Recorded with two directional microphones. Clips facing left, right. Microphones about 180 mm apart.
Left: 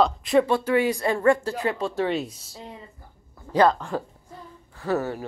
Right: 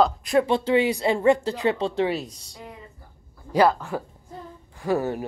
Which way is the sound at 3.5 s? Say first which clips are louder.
Even; 10° right (ahead or behind).